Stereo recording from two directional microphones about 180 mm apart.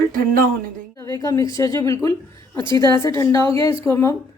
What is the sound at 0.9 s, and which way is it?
A woman's voice, 15° left (ahead or behind).